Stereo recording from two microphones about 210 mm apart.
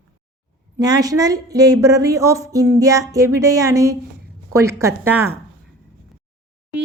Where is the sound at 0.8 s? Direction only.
20° right (ahead or behind).